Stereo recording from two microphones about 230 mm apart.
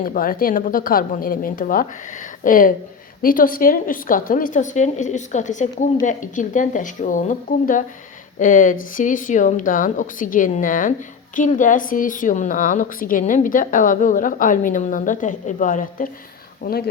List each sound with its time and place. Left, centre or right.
0.0 s a woman's voice: left